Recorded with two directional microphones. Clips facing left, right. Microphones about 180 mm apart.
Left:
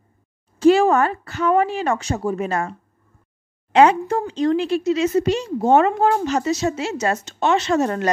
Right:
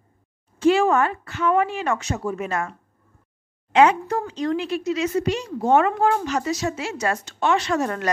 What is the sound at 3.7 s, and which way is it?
Speech, 30° left (ahead or behind).